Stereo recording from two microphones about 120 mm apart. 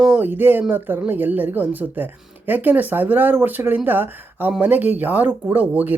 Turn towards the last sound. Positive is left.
turn(degrees=-15)  # may be behind; listen again after turning